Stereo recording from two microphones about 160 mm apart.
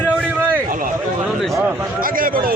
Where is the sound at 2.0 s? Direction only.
60° right (ahead or behind).